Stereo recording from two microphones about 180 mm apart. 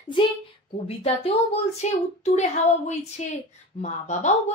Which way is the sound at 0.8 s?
35° left (ahead or behind).